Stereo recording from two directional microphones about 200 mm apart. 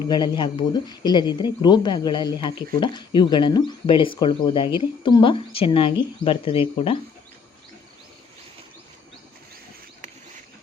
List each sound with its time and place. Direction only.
0.1 s speech: 20° left (ahead or behind)